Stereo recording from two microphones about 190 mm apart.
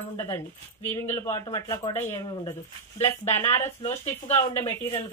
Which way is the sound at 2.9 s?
35° left (ahead or behind).